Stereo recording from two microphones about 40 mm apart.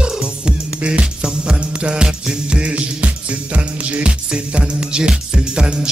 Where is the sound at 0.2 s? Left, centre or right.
Right.